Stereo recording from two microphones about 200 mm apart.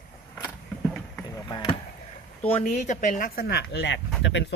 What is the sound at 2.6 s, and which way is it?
Speech, 35° left (ahead or behind).